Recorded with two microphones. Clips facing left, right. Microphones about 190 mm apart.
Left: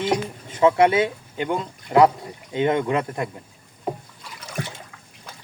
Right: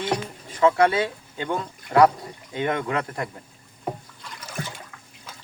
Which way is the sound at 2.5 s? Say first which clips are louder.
Left 5 dB; 20° left (ahead or behind).